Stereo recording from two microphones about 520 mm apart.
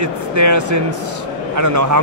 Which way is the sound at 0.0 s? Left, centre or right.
Right.